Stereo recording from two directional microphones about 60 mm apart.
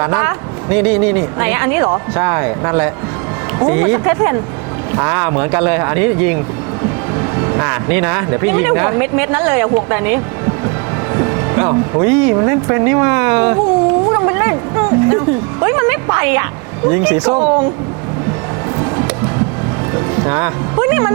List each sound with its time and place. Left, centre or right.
0.0 s speech: right
6.8 s music: right
7.9 s speech: right
11.1 s music: right
12.4 s cat: right
17.1 s speech: right
17.3 s speech: right
18.8 s music: right